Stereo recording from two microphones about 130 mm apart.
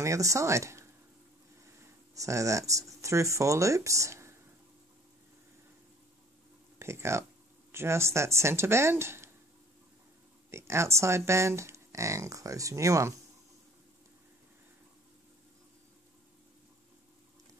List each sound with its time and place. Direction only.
0.0 s speech: 25° right (ahead or behind)
2.1 s speech: 25° right (ahead or behind)
6.8 s speech: 20° right (ahead or behind)
10.5 s speech: 20° right (ahead or behind)